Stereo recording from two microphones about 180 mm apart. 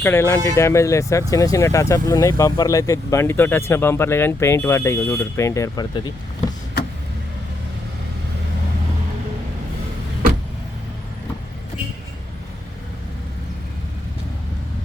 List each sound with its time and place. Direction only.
0.0 s speech: 15° left (ahead or behind)